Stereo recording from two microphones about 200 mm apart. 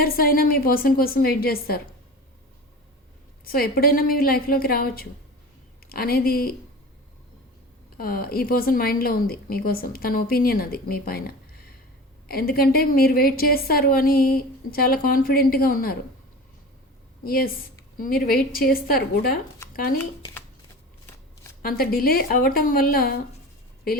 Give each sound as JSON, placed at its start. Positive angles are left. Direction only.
{"t": 0.0, "sound": "a woman's voice", "side_deg": 45}
{"t": 3.4, "sound": "a woman's voice", "side_deg": 45}
{"t": 7.9, "sound": "a woman's voice", "side_deg": 45}
{"t": 12.3, "sound": "a woman's voice", "side_deg": 50}
{"t": 17.2, "sound": "a woman's voice", "side_deg": 45}
{"t": 21.6, "sound": "a woman's voice", "side_deg": 50}